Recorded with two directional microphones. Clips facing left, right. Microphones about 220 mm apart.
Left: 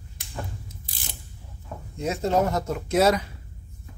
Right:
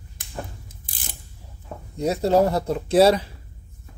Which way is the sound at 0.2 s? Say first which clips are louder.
Right 1 dB; 50° right (ahead or behind).